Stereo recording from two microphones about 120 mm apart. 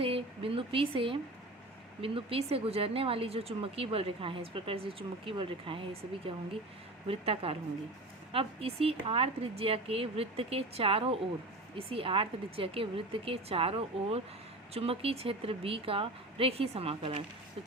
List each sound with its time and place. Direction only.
0.0 s a woman's voice: 50° right (ahead or behind)